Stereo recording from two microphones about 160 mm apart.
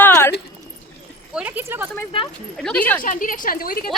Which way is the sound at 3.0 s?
55° left (ahead or behind).